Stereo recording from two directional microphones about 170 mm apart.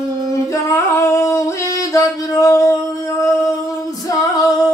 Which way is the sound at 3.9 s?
20° left (ahead or behind).